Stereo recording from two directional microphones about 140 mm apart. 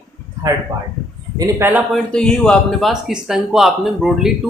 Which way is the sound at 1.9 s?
5° left (ahead or behind).